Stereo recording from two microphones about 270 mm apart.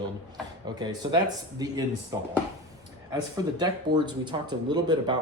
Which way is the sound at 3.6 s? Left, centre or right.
Centre.